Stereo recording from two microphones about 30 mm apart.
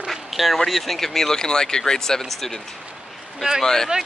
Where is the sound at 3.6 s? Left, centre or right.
Centre.